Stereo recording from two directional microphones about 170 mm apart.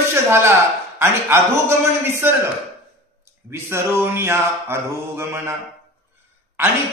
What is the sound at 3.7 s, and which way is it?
Mantra, 15° right (ahead or behind).